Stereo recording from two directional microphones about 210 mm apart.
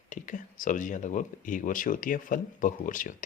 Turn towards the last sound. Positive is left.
turn(degrees=40)  # may be behind; listen again after turning